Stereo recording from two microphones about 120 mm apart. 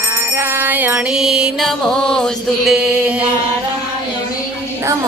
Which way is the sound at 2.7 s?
10° right (ahead or behind).